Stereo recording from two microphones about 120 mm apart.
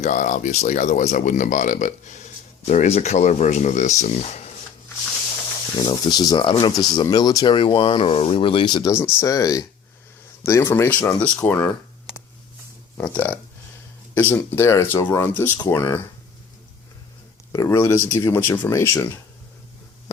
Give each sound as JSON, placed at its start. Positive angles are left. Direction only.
{"t": 0.0, "sound": "speech", "side_deg": 90}
{"t": 5.8, "sound": "speech", "side_deg": 35}
{"t": 6.4, "sound": "speech", "side_deg": 45}
{"t": 8.9, "sound": "speech", "side_deg": 20}
{"t": 13.0, "sound": "speech", "side_deg": 15}
{"t": 17.5, "sound": "speech", "side_deg": 25}